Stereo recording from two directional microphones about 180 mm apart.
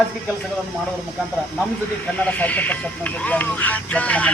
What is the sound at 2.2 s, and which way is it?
Music, 10° left (ahead or behind).